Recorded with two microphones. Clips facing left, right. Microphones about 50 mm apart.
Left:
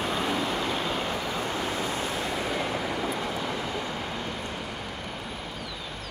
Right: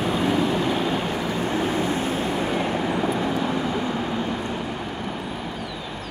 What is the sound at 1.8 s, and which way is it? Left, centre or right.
Vehicle, right.